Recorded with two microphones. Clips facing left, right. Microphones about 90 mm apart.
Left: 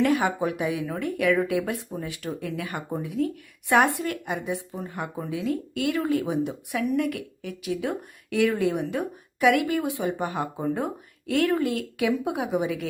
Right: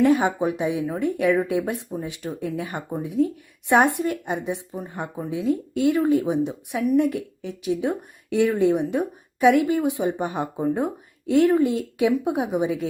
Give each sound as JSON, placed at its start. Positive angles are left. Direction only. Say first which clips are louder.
{"t": 0.0, "sound": "a woman's voice", "louder": "right 4 dB", "side_deg": -20}